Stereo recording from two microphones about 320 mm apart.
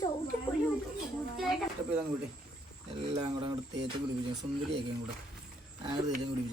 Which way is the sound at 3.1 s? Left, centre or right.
Centre.